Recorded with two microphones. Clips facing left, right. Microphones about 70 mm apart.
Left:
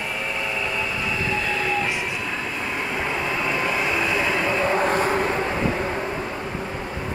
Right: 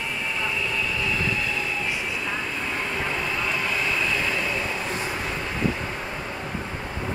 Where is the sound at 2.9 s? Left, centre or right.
Left.